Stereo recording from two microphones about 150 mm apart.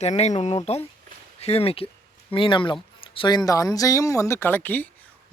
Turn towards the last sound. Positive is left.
turn(degrees=10)  # may be behind; listen again after turning